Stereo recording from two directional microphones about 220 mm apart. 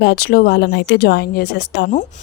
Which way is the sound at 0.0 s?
45° left (ahead or behind).